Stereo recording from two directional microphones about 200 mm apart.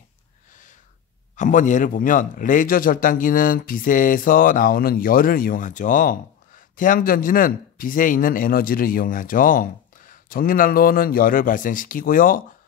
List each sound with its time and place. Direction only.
1.3 s speech: 40° left (ahead or behind)